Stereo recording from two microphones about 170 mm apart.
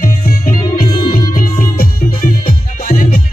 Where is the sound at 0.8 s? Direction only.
30° left (ahead or behind).